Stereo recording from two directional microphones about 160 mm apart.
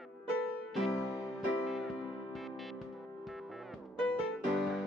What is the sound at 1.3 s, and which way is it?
Music, centre (ahead or behind).